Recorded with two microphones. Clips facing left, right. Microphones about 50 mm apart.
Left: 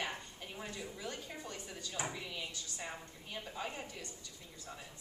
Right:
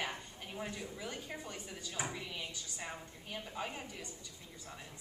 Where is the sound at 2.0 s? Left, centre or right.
Centre.